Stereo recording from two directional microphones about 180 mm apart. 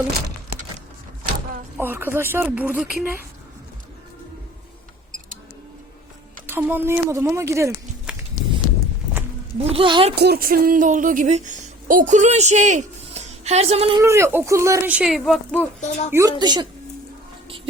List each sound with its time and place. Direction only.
1.8 s speech: 10° right (ahead or behind)
6.5 s speech: 10° right (ahead or behind)
8.1 s a sound: 5° right (ahead or behind)
9.6 s speech: 30° right (ahead or behind)
10.2 s speech: 60° right (ahead or behind); by 14.0 s 35° right (ahead or behind)
14.0 s speech: 15° right (ahead or behind); by 15.6 s 5° left (ahead or behind)
15.8 s speech: 40° left (ahead or behind)
16.1 s a woman's voice: 20° right (ahead or behind)